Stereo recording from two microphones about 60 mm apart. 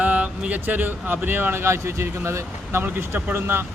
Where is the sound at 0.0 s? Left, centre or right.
Right.